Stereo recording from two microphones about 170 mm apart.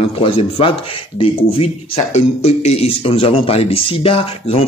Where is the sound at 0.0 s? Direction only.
35° left (ahead or behind).